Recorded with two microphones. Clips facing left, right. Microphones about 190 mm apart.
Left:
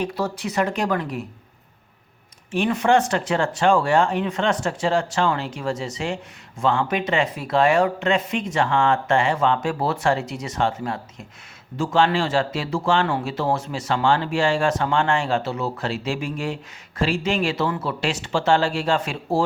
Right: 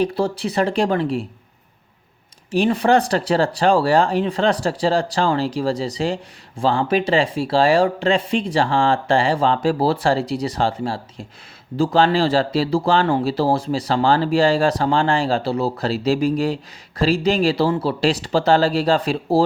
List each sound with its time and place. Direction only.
0.0 s a man's voice: 30° right (ahead or behind)
2.5 s a man's voice: 35° right (ahead or behind)